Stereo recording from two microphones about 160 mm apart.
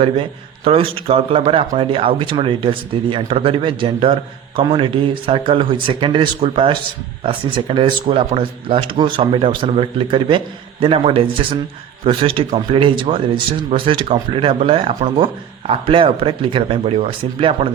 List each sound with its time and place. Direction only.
0.0 s a man's voice: 35° right (ahead or behind)